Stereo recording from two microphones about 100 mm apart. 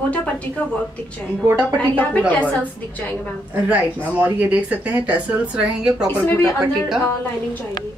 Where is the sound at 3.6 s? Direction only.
15° right (ahead or behind).